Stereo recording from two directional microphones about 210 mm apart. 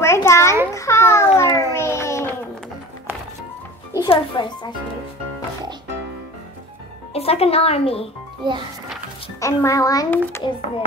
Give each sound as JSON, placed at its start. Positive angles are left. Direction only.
{"t": 0.0, "sound": "a sound", "side_deg": 10}
{"t": 3.9, "sound": "music", "side_deg": 20}
{"t": 7.2, "sound": "speech", "side_deg": 30}
{"t": 8.4, "sound": "speech", "side_deg": -20}
{"t": 9.4, "sound": "a child's voice", "side_deg": 15}